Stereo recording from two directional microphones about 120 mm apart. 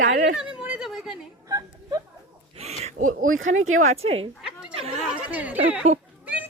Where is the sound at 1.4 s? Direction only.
30° right (ahead or behind).